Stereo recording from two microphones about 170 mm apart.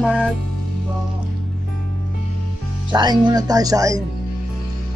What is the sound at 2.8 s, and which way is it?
Speech, 25° right (ahead or behind).